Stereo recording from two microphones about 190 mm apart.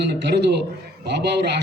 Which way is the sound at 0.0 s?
65° right (ahead or behind).